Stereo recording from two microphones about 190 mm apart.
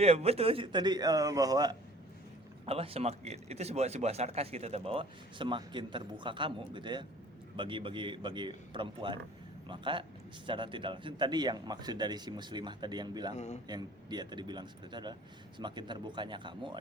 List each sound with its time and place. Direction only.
0.0 s a man's voice: 30° right (ahead or behind)
2.6 s a man's voice: 30° right (ahead or behind)
13.3 s a man's voice: 35° left (ahead or behind)
13.7 s a man's voice: 20° right (ahead or behind)